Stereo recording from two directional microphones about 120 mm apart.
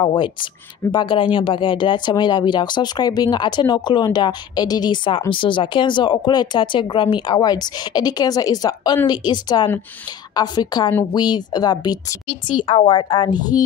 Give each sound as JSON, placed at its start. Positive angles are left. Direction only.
{"t": 0.0, "sound": "speech", "side_deg": 45}